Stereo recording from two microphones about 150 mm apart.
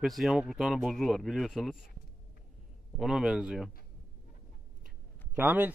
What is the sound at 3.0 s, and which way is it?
Speech, 5° right (ahead or behind).